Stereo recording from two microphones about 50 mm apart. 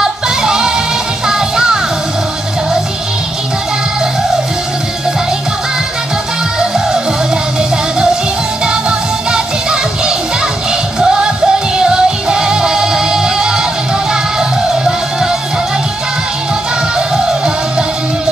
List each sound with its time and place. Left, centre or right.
0.0 s music: centre
9.3 s music: centre